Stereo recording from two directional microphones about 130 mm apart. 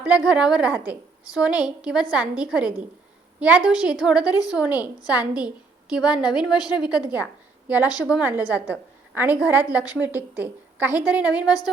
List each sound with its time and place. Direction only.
0.0 s a woman's voice: 5° right (ahead or behind)
6.6 s a woman's voice: 30° left (ahead or behind)
6.8 s a woman's voice: 10° right (ahead or behind)